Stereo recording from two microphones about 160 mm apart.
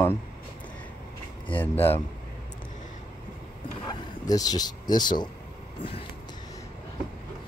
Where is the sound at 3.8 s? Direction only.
25° left (ahead or behind).